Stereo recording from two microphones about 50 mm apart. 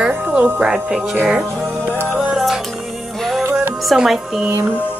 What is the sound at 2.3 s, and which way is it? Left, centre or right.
Music, centre.